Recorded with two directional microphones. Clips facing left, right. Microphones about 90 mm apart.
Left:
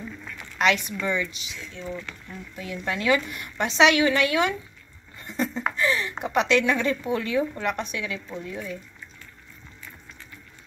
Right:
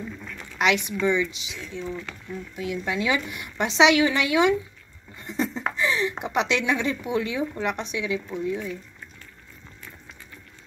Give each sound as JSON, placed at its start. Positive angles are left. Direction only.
{"t": 0.6, "sound": "a woman's voice", "side_deg": -15}
{"t": 2.5, "sound": "a woman's voice", "side_deg": -10}
{"t": 5.2, "sound": "a sound", "side_deg": -20}
{"t": 6.5, "sound": "a woman's voice", "side_deg": -15}